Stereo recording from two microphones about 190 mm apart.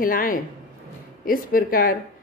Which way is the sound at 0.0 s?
45° left (ahead or behind).